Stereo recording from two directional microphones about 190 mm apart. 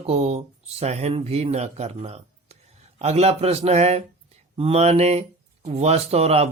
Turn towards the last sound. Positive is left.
turn(degrees=-35)  # may be behind; listen again after turning